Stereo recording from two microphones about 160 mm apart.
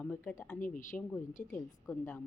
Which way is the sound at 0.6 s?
55° left (ahead or behind).